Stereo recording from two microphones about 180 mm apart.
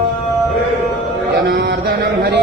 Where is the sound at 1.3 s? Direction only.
60° right (ahead or behind).